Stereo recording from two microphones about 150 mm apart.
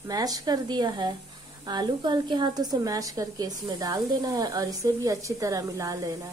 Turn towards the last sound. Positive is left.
turn(degrees=-25)  # may be behind; listen again after turning